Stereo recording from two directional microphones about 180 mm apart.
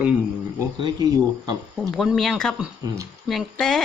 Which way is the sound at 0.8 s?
20° right (ahead or behind).